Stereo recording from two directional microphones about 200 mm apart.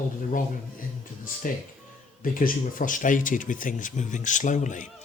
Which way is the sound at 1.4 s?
45° left (ahead or behind).